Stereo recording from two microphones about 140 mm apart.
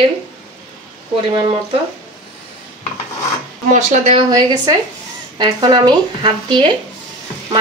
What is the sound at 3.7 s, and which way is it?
Speech, 60° right (ahead or behind).